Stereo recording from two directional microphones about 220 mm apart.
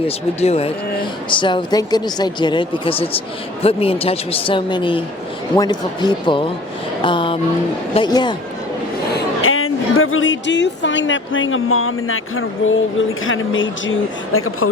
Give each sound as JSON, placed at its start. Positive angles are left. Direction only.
{"t": 0.3, "sound": "speech", "side_deg": 30}
{"t": 9.4, "sound": "speech", "side_deg": 70}
{"t": 14.3, "sound": "speech", "side_deg": 75}